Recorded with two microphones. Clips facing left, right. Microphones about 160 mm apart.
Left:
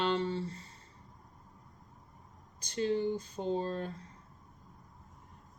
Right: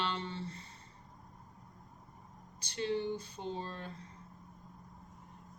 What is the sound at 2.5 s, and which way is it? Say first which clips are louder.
Speech: left 4 dB; 40° left (ahead or behind).